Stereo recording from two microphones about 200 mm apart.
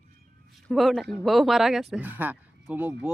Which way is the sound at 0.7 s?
Centre (ahead or behind).